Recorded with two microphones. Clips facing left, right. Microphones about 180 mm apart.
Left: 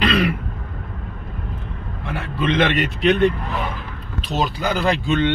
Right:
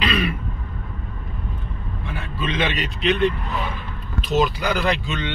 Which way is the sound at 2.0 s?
75° left (ahead or behind).